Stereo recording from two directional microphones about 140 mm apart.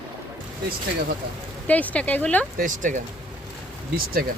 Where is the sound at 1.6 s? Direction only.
10° left (ahead or behind).